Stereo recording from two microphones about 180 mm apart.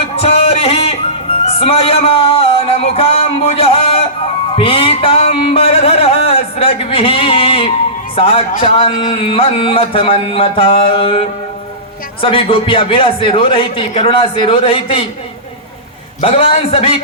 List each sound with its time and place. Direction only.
0.0 s music: 35° left (ahead or behind)
8.1 s a man's voice: 30° left (ahead or behind)
16.2 s a man's voice: 30° left (ahead or behind)